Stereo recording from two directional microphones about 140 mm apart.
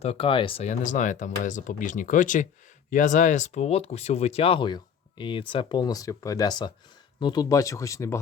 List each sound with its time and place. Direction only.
0.0 s speech: 45° left (ahead or behind)
0.7 s speech: 65° left (ahead or behind); by 8.2 s 20° left (ahead or behind)